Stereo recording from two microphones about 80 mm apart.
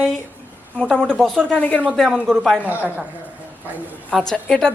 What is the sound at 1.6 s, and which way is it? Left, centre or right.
Speech, centre.